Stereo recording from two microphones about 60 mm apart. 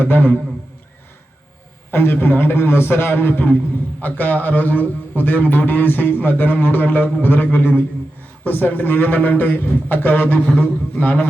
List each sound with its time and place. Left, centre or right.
0.0 s a man's voice: left
1.9 s a man's voice: left
10.9 s a sound: left